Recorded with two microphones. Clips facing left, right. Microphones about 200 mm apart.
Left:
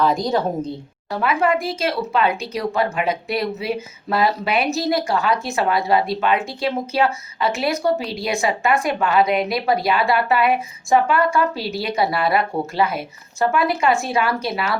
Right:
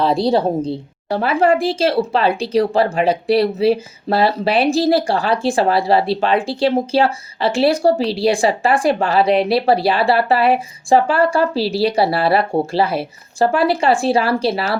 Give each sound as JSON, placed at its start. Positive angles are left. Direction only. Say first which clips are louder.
{"t": 0.0, "sound": "a woman's voice", "louder": "right 4 dB", "side_deg": -30}